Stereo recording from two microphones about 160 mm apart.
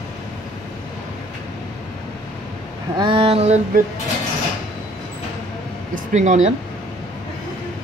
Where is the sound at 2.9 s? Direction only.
30° right (ahead or behind).